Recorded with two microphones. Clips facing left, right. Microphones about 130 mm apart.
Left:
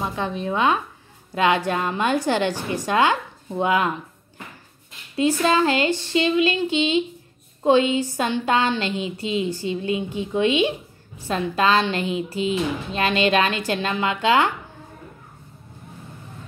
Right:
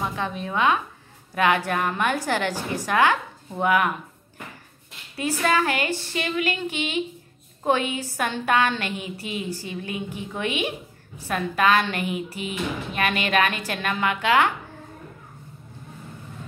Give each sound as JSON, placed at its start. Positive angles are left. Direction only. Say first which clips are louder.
{"t": 0.1, "sound": "speech", "louder": "left 3 dB", "side_deg": 30}
{"t": 5.1, "sound": "speech", "louder": "left 4 dB", "side_deg": 25}